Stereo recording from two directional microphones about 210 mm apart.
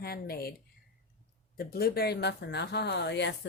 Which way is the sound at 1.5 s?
45° left (ahead or behind).